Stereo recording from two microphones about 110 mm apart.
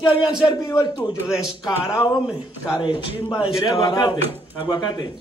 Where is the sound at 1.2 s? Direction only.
5° right (ahead or behind).